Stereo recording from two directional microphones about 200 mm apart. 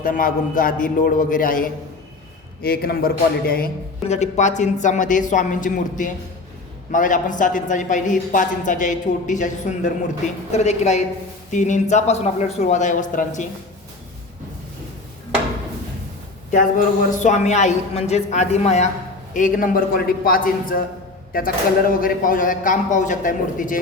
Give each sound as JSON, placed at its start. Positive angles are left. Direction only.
{"t": 0.0, "sound": "speech", "side_deg": 45}
{"t": 4.1, "sound": "speech", "side_deg": 35}
{"t": 16.5, "sound": "speech", "side_deg": 40}